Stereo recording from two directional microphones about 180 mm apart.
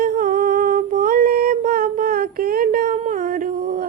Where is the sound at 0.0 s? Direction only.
50° right (ahead or behind).